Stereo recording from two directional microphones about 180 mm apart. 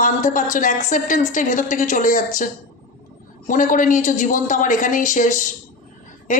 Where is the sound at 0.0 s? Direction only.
45° left (ahead or behind).